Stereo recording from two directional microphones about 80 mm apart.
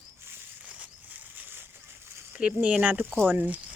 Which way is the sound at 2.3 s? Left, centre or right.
Centre.